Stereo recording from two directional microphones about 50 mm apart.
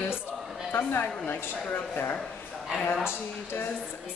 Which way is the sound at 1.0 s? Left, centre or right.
Left.